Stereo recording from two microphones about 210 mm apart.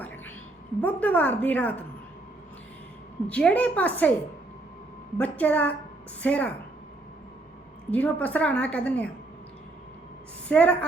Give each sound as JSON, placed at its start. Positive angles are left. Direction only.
{"t": 0.8, "sound": "a woman's voice", "side_deg": 10}
{"t": 3.2, "sound": "a woman's voice", "side_deg": 5}
{"t": 5.1, "sound": "a woman's voice", "side_deg": 5}
{"t": 7.9, "sound": "a woman's voice", "side_deg": 5}
{"t": 10.5, "sound": "a woman's voice", "side_deg": 5}